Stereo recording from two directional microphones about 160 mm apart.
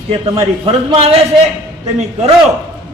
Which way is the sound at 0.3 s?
30° right (ahead or behind).